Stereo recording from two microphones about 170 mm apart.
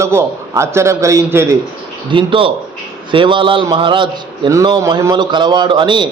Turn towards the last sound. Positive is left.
turn(degrees=-30)  # may be behind; listen again after turning